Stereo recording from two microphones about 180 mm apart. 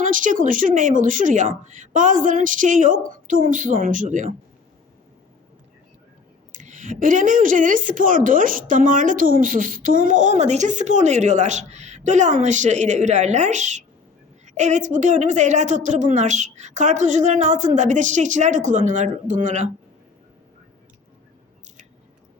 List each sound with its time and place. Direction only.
0.0 s a woman's voice: 45° right (ahead or behind)
6.5 s a woman's voice: 45° right (ahead or behind)